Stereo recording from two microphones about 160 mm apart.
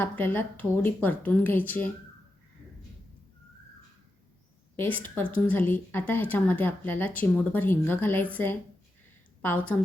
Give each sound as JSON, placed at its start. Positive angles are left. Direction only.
{"t": 0.0, "sound": "speech", "side_deg": 10}
{"t": 4.8, "sound": "speech", "side_deg": 10}